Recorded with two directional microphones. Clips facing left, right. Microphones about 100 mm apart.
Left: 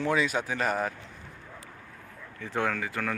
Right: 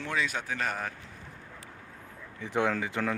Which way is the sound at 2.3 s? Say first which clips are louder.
Right 1 dB; 15° right (ahead or behind).